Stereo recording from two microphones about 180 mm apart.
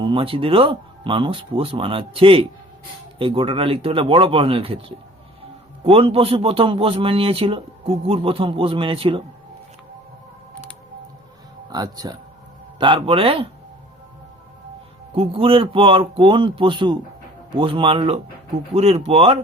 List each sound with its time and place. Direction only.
0.0 s a man's voice: 30° right (ahead or behind)
5.8 s a man's voice: 30° right (ahead or behind)
11.7 s speech: 20° right (ahead or behind)
15.1 s a man's voice: 30° right (ahead or behind)